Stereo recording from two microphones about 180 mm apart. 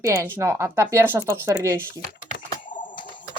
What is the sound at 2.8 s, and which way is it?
Typing, 25° left (ahead or behind).